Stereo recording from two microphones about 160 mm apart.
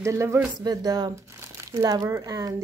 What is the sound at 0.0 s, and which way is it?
A woman's voice, 20° right (ahead or behind).